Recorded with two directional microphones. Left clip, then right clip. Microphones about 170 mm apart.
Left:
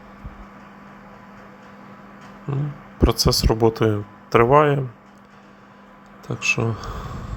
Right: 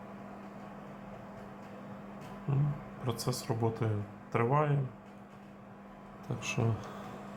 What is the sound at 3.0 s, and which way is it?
Speech, 45° left (ahead or behind).